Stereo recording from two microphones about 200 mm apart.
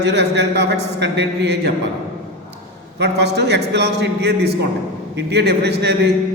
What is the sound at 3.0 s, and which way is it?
A man's voice, 55° right (ahead or behind).